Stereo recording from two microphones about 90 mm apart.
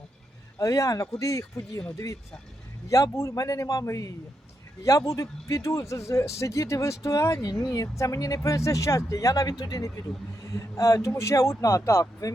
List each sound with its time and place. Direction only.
0.6 s speech: 40° left (ahead or behind)
2.9 s speech: 35° left (ahead or behind)